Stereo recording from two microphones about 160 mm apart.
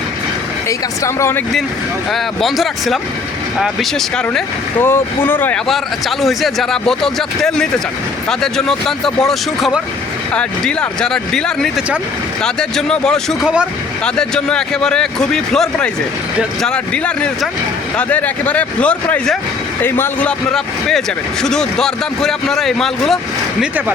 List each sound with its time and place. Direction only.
0.7 s speech: 20° left (ahead or behind)
2.1 s speech: centre (ahead or behind)
4.8 s speech: 15° left (ahead or behind)
5.6 s speech: centre (ahead or behind)